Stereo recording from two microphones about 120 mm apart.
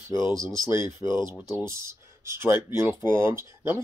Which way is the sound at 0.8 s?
35° left (ahead or behind).